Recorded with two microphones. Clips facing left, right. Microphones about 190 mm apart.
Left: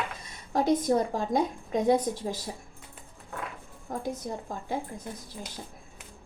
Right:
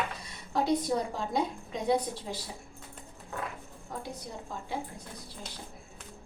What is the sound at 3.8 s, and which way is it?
Speech, 45° left (ahead or behind).